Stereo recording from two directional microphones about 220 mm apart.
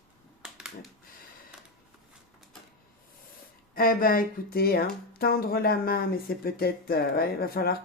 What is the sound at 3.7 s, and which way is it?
Speech, 40° left (ahead or behind).